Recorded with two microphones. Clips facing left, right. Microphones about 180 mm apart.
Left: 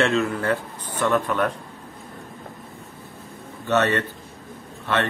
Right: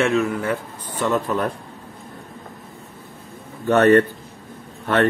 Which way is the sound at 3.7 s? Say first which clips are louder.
Right 7 dB; 45° right (ahead or behind).